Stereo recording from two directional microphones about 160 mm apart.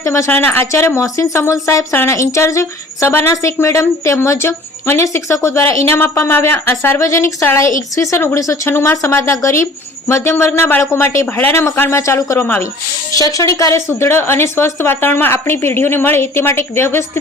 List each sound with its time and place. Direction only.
0.0 s a woman's voice: 20° left (ahead or behind)